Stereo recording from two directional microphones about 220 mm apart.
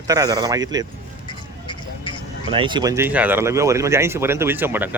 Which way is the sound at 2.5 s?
20° right (ahead or behind).